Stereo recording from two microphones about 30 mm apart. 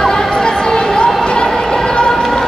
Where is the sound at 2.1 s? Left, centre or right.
Centre.